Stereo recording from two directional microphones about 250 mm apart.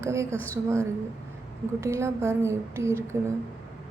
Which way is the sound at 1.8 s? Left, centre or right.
Centre.